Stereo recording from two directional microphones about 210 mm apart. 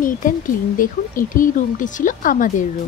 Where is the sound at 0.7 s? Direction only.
40° left (ahead or behind).